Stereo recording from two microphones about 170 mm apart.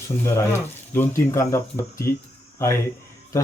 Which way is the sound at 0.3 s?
15° left (ahead or behind).